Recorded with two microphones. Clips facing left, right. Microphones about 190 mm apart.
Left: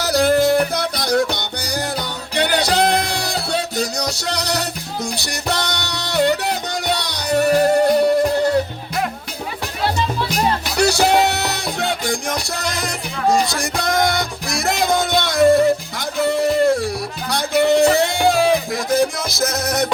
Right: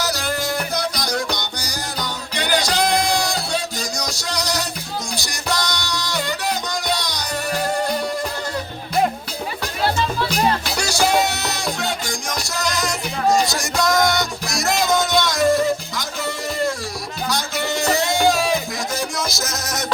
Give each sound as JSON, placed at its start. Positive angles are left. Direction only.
{"t": 0.0, "sound": "music", "side_deg": 60}
{"t": 10.8, "sound": "music", "side_deg": 60}